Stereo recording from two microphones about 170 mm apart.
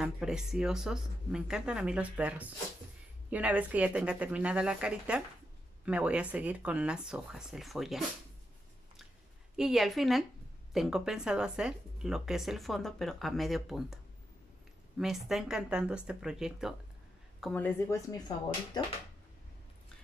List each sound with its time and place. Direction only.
0.0 s speech: 5° right (ahead or behind)
9.6 s speech: centre (ahead or behind)
15.0 s speech: centre (ahead or behind)
17.4 s a woman's voice: 5° left (ahead or behind); by 18.9 s 25° left (ahead or behind)